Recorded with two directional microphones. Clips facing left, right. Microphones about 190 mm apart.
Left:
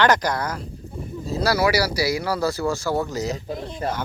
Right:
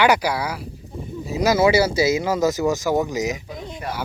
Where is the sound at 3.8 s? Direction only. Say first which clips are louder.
Left 4 dB; 30° left (ahead or behind).